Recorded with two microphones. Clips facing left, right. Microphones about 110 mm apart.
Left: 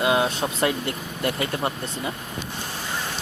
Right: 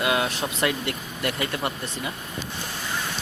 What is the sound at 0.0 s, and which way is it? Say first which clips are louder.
Speech: left 3 dB; 25° left (ahead or behind).